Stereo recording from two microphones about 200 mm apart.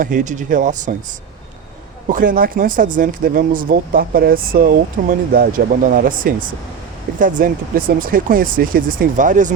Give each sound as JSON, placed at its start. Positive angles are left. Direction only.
{"t": 0.0, "sound": "speech", "side_deg": -40}
{"t": 2.0, "sound": "speech", "side_deg": -45}